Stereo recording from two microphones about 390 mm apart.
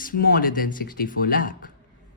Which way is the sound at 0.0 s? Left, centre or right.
Left.